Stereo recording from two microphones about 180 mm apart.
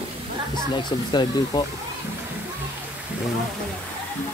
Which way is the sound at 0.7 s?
25° left (ahead or behind).